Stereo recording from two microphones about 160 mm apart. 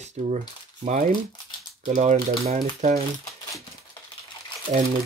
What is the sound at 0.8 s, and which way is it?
Speech, 50° right (ahead or behind).